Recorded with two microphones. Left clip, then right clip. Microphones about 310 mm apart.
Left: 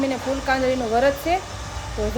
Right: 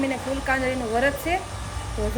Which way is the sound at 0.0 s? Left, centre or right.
Centre.